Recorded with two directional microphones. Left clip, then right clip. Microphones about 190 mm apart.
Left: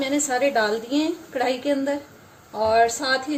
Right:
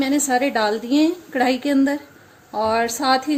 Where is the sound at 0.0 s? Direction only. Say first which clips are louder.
Right 2 dB; 50° right (ahead or behind).